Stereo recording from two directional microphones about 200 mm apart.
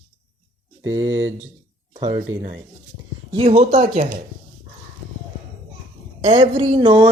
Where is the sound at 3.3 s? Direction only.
30° right (ahead or behind).